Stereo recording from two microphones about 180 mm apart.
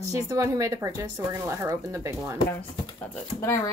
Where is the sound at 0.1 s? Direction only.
15° right (ahead or behind).